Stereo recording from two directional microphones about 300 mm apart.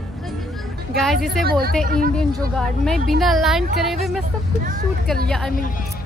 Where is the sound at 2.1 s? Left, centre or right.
Centre.